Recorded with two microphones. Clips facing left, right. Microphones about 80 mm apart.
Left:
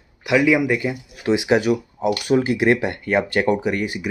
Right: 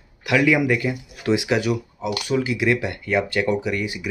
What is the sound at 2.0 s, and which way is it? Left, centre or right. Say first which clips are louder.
Speech: left 5 dB; left.